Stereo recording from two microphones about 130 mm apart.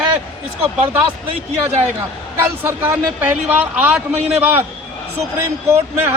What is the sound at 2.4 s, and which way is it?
Speech, 20° right (ahead or behind).